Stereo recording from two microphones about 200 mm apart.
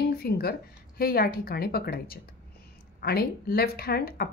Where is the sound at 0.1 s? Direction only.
50° left (ahead or behind).